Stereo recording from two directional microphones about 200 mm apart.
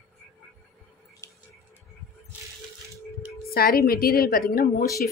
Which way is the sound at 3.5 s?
50° left (ahead or behind).